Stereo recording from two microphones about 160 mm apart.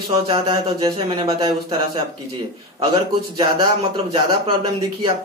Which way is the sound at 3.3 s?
25° right (ahead or behind).